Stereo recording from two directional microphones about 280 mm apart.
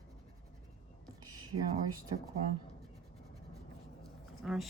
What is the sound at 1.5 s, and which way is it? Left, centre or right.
Speech, right.